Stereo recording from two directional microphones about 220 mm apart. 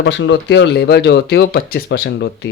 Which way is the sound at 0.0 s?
55° left (ahead or behind).